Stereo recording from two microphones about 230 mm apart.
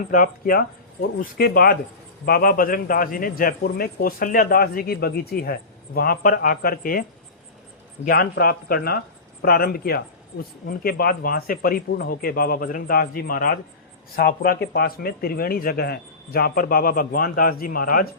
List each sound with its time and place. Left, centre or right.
0.0 s a man's voice: left
8.0 s a man's voice: left